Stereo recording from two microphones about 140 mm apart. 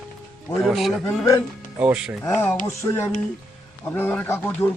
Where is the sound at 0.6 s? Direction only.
Centre (ahead or behind).